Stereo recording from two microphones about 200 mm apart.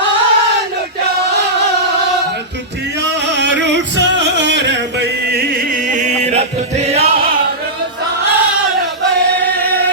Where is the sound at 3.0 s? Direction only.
60° right (ahead or behind).